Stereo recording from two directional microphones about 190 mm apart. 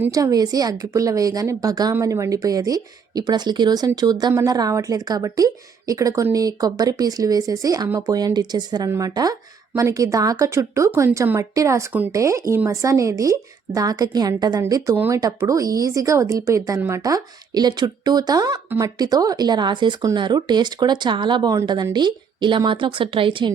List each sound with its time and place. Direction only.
0.0 s speech: 20° right (ahead or behind)